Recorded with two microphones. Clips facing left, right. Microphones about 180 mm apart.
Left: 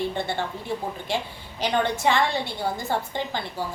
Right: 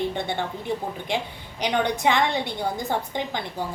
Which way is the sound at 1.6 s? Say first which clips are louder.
Even; 15° right (ahead or behind).